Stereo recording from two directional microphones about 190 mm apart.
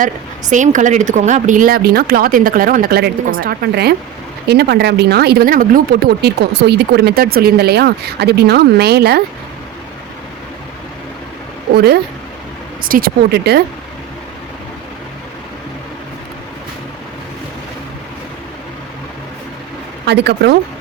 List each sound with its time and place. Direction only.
0.5 s speech: 40° right (ahead or behind); by 9.2 s 55° right (ahead or behind)
11.7 s speech: 55° right (ahead or behind)
20.1 s speech: 60° right (ahead or behind)